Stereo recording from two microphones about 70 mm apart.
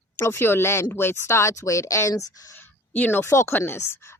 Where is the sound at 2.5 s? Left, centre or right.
Left.